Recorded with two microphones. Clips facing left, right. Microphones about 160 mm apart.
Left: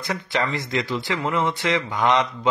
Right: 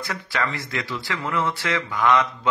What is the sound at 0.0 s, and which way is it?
Speech, 20° left (ahead or behind).